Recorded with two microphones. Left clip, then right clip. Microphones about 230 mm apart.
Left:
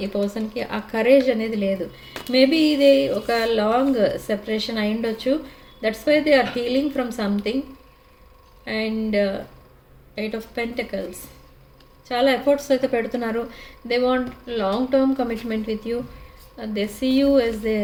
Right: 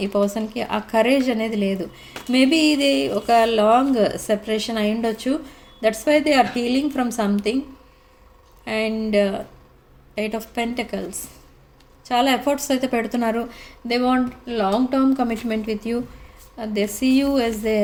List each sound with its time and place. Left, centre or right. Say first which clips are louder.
0.1 s speech: right 4 dB; right
2.3 s speech: even; right
8.6 s speech: right 2 dB; right
12.0 s speech: even; right